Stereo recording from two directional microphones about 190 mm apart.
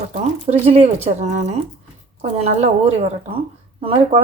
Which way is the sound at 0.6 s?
30° right (ahead or behind).